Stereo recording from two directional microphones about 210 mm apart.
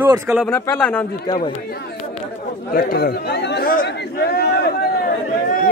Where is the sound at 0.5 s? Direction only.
5° left (ahead or behind).